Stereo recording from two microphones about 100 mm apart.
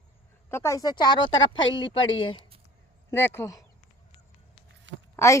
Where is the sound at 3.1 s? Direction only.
25° left (ahead or behind).